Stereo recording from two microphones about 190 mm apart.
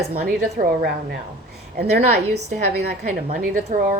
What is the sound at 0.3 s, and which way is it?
Speech, 45° right (ahead or behind).